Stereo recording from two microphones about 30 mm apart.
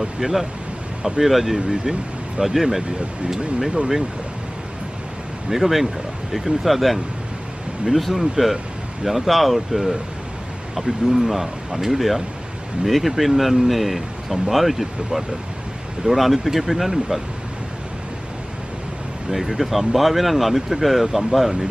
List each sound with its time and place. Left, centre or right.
0.2 s speech: centre
1.7 s speech: right
2.4 s speech: centre
5.5 s speech: centre
8.0 s speech: centre
16.1 s speech: centre
19.3 s speech: centre